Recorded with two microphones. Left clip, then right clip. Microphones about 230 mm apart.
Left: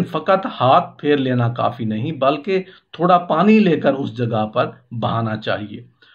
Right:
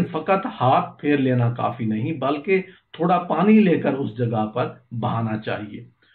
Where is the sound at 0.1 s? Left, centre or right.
Left.